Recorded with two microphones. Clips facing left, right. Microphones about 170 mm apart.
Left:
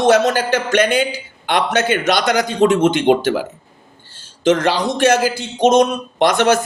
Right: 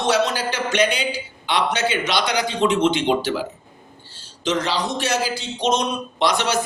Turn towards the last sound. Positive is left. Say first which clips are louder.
# left 7 dB
turn(degrees=50)  # may be behind; listen again after turning